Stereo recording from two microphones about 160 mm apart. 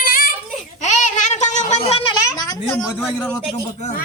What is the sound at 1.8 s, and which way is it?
Speech, 30° left (ahead or behind).